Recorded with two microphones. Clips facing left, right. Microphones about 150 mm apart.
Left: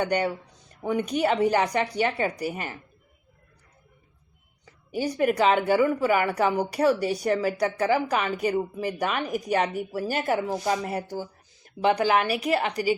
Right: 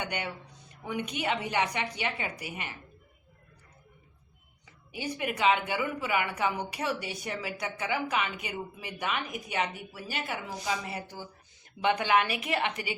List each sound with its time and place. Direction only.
0.0 s a woman's voice: 40° left (ahead or behind)
4.9 s a woman's voice: 40° left (ahead or behind)